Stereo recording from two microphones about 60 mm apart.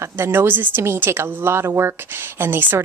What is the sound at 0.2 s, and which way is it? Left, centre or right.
Speech, right.